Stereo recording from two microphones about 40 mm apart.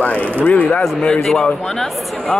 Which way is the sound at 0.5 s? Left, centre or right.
Left.